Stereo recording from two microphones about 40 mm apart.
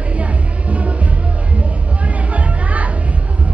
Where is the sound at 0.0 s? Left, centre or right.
Right.